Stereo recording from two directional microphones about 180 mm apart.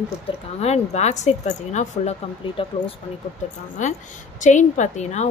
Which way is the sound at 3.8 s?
45° left (ahead or behind).